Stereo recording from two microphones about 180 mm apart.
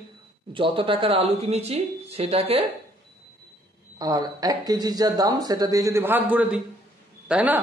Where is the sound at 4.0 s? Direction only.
20° right (ahead or behind).